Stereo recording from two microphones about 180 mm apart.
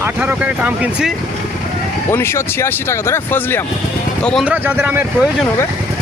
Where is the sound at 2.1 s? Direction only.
15° left (ahead or behind).